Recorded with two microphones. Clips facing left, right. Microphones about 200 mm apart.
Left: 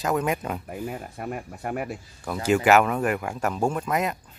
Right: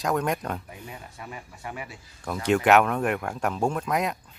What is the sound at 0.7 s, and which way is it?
Speech, 55° left (ahead or behind).